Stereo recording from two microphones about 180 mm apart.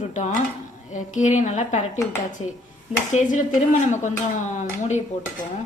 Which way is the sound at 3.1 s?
45° left (ahead or behind).